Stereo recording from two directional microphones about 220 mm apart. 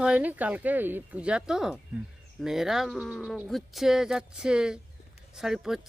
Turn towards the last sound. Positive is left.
turn(degrees=0)  # may be behind; listen again after turning